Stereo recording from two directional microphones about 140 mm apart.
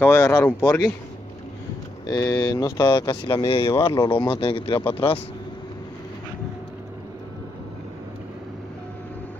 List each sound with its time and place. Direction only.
0.0 s speech: 20° left (ahead or behind)
2.0 s speech: 25° left (ahead or behind); by 5.2 s 45° left (ahead or behind)